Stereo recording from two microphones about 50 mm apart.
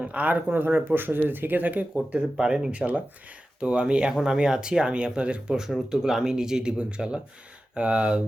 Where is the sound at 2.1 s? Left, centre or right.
Centre.